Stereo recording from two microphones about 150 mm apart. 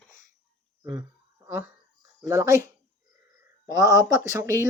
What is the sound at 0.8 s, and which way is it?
Speech, 25° right (ahead or behind).